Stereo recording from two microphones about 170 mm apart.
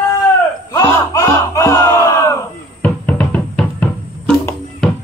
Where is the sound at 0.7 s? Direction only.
20° left (ahead or behind).